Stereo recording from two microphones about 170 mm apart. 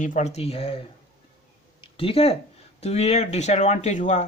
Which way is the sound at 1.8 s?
30° left (ahead or behind).